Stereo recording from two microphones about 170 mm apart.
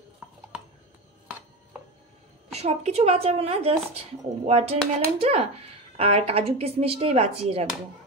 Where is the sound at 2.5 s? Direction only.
40° right (ahead or behind).